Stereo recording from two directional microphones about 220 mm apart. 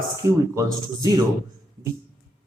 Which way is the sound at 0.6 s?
15° right (ahead or behind).